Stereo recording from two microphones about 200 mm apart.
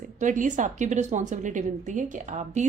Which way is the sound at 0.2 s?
40° right (ahead or behind).